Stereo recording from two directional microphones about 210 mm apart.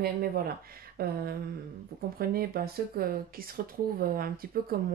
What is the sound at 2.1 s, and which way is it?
Speech, 45° right (ahead or behind).